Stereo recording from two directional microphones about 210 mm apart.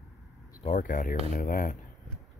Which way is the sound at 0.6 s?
35° left (ahead or behind).